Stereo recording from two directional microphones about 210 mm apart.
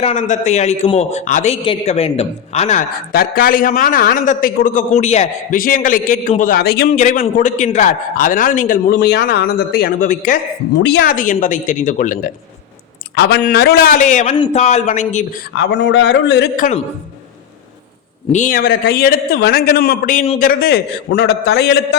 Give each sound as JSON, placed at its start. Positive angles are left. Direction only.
{"t": 0.0, "sound": "a man's voice", "side_deg": 35}
{"t": 3.1, "sound": "a man's voice", "side_deg": 45}
{"t": 6.9, "sound": "a man's voice", "side_deg": 35}
{"t": 10.8, "sound": "a man's voice", "side_deg": 50}
{"t": 13.1, "sound": "a man's voice", "side_deg": 50}
{"t": 15.5, "sound": "speech", "side_deg": 55}
{"t": 16.6, "sound": "a man's voice", "side_deg": 35}
{"t": 18.3, "sound": "a man's voice", "side_deg": 35}
{"t": 20.4, "sound": "a man's voice", "side_deg": 45}